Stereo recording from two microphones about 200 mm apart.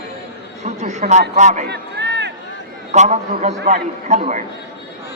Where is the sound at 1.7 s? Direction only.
60° right (ahead or behind).